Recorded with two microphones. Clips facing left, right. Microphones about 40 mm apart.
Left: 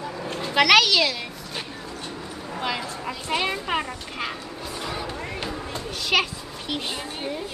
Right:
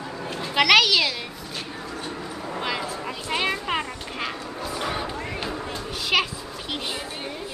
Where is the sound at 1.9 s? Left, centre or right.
Right.